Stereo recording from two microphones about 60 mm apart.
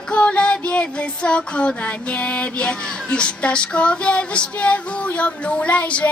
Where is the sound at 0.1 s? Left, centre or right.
Left.